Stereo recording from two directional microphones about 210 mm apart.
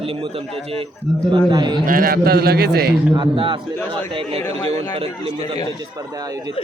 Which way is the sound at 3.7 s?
10° left (ahead or behind).